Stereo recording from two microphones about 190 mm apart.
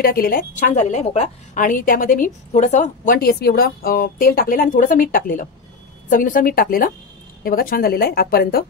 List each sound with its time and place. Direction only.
0.0 s a woman's voice: 50° left (ahead or behind)
3.2 s a woman's voice: 55° left (ahead or behind)